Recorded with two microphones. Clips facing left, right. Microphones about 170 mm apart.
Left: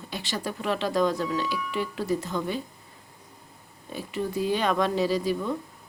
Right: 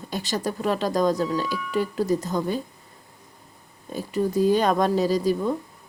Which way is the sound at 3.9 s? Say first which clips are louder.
Right 5 dB; 40° right (ahead or behind).